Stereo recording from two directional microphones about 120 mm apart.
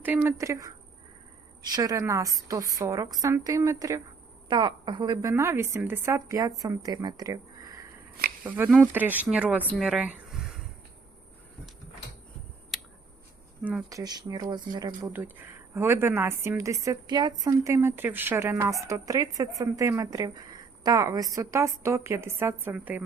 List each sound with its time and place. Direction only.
0.0 s a woman's voice: 15° right (ahead or behind)
4.4 s speech: 40° right (ahead or behind)
5.3 s a woman's voice: 20° right (ahead or behind)
8.4 s speech: 15° right (ahead or behind)
9.7 s a sound: 5° right (ahead or behind)
12.7 s a sound: centre (ahead or behind)
13.9 s speech: 35° right (ahead or behind)
15.1 s a woman's voice: 15° right (ahead or behind)